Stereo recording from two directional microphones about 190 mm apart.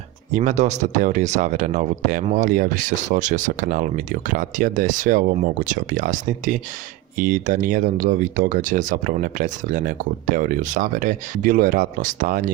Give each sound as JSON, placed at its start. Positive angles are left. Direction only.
{"t": 0.3, "sound": "speech", "side_deg": -40}